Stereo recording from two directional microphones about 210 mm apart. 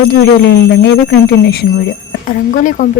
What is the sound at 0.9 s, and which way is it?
Speech, 50° left (ahead or behind).